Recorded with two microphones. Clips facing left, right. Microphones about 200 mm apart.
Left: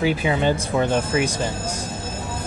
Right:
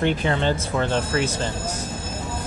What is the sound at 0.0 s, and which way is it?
Speech, 5° left (ahead or behind).